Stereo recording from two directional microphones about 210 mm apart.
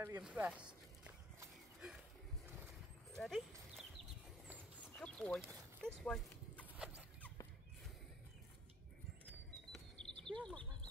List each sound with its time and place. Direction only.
0.0 s walk: 10° right (ahead or behind)
3.2 s speech: centre (ahead or behind)
4.9 s a sound: 5° left (ahead or behind)
9.9 s goat: 5° left (ahead or behind)